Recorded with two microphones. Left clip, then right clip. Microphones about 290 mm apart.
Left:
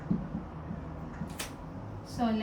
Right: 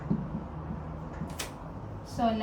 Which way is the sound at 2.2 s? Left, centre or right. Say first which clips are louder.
Right 4 dB; centre.